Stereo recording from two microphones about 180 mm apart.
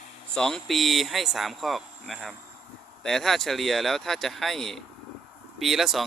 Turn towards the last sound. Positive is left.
turn(degrees=0)  # may be behind; listen again after turning